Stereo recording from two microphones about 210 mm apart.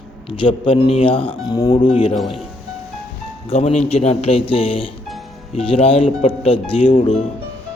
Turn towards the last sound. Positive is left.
turn(degrees=25)  # may be behind; listen again after turning